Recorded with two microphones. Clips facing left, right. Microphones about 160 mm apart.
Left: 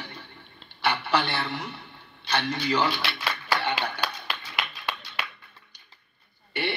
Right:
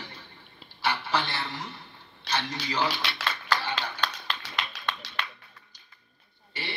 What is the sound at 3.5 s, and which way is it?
Clapping, 60° left (ahead or behind).